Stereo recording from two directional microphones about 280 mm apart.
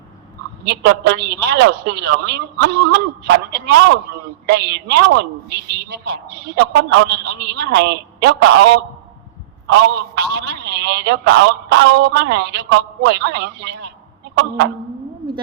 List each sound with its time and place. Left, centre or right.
0.6 s a man's voice: right